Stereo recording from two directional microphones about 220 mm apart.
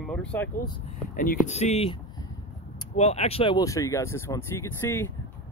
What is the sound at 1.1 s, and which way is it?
Speech, 40° left (ahead or behind).